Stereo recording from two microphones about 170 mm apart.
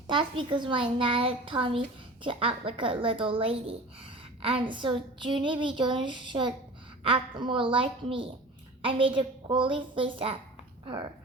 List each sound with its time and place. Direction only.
0.1 s a child's voice: 30° right (ahead or behind)